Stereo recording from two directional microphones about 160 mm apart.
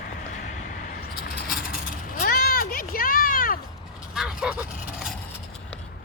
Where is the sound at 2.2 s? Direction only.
70° left (ahead or behind).